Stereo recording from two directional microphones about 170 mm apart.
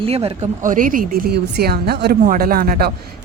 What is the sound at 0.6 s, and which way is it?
Speech, 50° right (ahead or behind).